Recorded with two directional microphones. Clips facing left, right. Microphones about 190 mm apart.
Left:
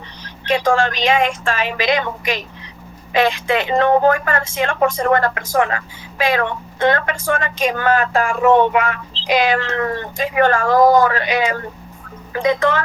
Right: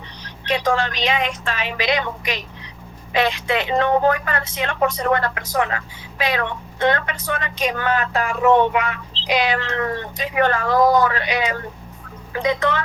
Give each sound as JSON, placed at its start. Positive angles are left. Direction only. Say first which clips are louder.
{"t": 0.4, "sound": "a woman's voice", "louder": "left 4 dB", "side_deg": 50}